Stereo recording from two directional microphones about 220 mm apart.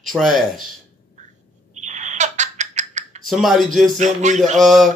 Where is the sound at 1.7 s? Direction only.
35° right (ahead or behind).